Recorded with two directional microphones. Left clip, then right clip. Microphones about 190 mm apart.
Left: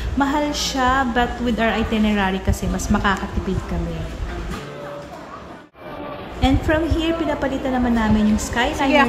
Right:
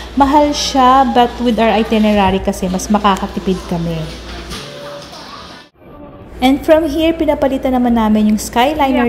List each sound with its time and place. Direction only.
0.2 s a woman's voice: 20° right (ahead or behind)
3.7 s a woman's voice: 30° right (ahead or behind)
6.4 s a woman's voice: 20° right (ahead or behind)